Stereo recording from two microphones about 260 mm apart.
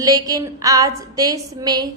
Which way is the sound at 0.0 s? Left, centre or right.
Centre.